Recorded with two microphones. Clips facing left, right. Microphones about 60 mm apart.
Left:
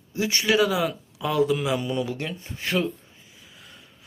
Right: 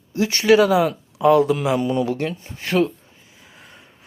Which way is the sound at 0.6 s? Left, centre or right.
Right.